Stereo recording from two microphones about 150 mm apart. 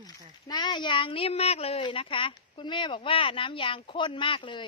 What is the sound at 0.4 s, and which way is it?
A woman's voice, 30° left (ahead or behind).